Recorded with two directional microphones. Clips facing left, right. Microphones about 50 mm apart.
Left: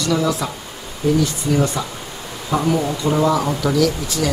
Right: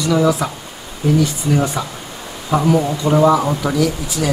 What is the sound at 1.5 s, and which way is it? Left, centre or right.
Speech, centre.